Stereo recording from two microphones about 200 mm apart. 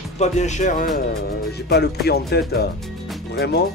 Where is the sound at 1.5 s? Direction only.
55° left (ahead or behind).